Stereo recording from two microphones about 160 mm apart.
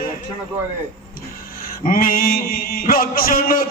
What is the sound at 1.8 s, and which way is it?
A man's voice, 60° left (ahead or behind).